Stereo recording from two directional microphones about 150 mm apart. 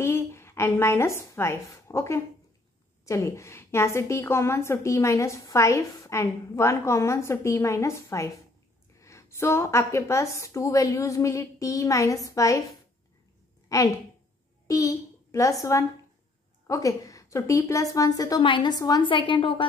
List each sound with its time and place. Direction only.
0.0 s a woman's voice: 15° left (ahead or behind)
13.7 s a woman's voice: 20° left (ahead or behind)
14.7 s a sound: 20° left (ahead or behind)
16.6 s a woman's voice: 20° left (ahead or behind)